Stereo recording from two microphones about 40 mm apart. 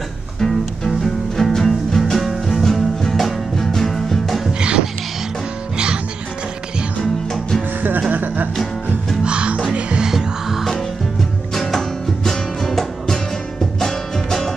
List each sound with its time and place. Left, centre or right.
0.4 s music: centre
4.6 s music: right
8.1 s music: right
9.2 s music: right
10.0 s music: centre
11.5 s music: centre